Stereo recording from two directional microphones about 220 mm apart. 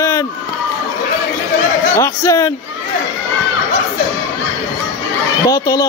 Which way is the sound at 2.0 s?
15° left (ahead or behind).